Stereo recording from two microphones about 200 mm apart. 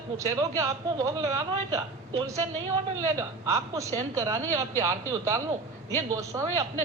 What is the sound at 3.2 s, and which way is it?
A man's voice, 15° right (ahead or behind).